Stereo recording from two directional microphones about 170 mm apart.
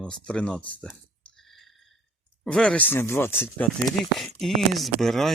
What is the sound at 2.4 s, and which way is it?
Speech, 5° left (ahead or behind).